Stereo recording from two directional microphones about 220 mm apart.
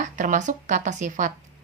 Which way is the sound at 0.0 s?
35° right (ahead or behind).